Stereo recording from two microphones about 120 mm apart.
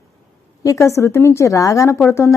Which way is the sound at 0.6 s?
25° left (ahead or behind).